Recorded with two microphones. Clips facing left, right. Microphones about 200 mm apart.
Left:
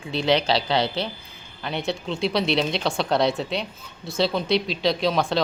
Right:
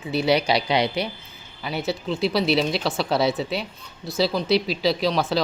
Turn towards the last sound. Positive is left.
turn(degrees=0)  # may be behind; listen again after turning